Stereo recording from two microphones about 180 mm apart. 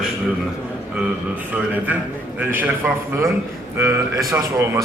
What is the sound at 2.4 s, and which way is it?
A man's voice, 10° right (ahead or behind).